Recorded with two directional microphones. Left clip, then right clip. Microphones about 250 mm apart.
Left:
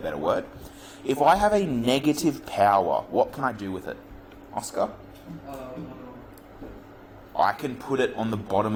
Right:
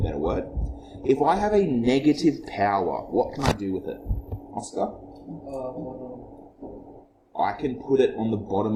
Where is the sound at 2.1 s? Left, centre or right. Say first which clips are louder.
Right 3 dB; left.